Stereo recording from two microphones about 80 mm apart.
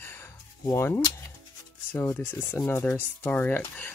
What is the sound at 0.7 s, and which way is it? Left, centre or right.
Speech, left.